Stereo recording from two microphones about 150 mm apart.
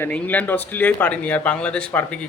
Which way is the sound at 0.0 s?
10° left (ahead or behind).